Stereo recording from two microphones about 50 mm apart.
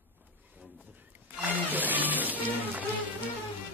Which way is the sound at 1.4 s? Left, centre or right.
Right.